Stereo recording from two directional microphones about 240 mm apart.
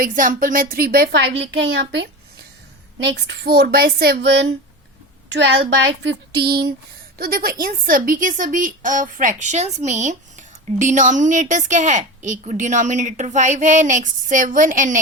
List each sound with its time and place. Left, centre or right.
0.0 s a woman's voice: right
3.1 s a woman's voice: right
5.9 s a woman's voice: right